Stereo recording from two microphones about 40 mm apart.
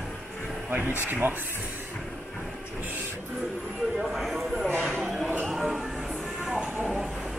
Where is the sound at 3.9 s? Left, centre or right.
Centre.